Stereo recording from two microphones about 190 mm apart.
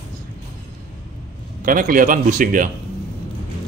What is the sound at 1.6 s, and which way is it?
Speech, 45° right (ahead or behind).